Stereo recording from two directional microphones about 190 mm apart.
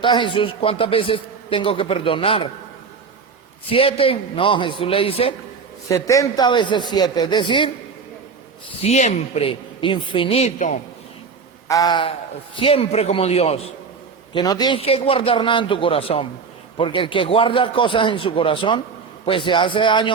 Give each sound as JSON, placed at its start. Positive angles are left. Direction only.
{"t": 0.0, "sound": "a man's voice", "side_deg": 25}
{"t": 3.7, "sound": "a man's voice", "side_deg": 30}
{"t": 5.9, "sound": "a man's voice", "side_deg": 15}
{"t": 8.8, "sound": "a woman's voice", "side_deg": 35}
{"t": 11.7, "sound": "a man's voice", "side_deg": 20}
{"t": 14.3, "sound": "a man's voice", "side_deg": 20}